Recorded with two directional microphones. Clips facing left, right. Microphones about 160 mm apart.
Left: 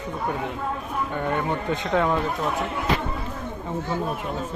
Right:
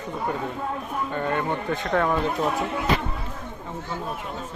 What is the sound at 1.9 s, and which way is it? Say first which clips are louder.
Speech: left 1 dB; 15° left (ahead or behind).